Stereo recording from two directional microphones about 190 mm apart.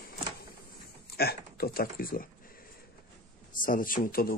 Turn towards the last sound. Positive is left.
turn(degrees=50)  # may be behind; listen again after turning